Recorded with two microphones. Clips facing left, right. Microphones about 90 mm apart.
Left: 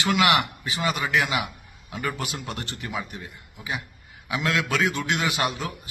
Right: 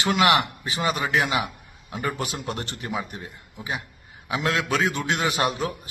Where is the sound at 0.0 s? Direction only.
35° right (ahead or behind).